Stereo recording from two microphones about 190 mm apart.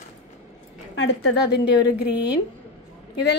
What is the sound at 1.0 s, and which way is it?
Speech, 60° left (ahead or behind).